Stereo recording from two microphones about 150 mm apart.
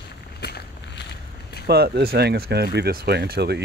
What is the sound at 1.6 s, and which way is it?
Speech, 90° right.